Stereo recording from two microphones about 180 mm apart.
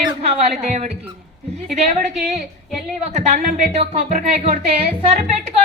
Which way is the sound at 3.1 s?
40° right (ahead or behind).